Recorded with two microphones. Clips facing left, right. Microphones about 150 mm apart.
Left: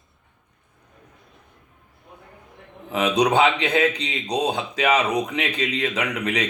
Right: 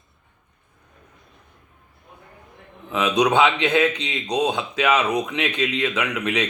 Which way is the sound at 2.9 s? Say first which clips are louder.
Even; 35° left (ahead or behind).